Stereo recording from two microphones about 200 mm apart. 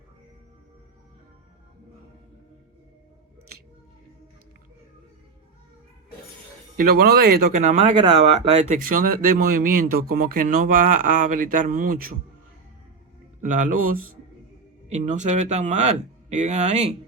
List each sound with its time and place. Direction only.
6.8 s speech: 50° right (ahead or behind)
13.4 s speech: 40° right (ahead or behind)